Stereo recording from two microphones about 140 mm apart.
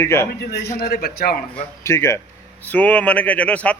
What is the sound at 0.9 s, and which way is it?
Speech, 90° left.